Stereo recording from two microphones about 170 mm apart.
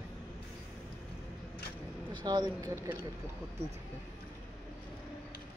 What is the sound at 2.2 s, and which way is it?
Speech, 25° right (ahead or behind).